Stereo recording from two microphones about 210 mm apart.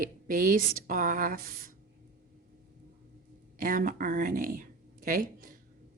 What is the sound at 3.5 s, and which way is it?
Speech, 40° right (ahead or behind).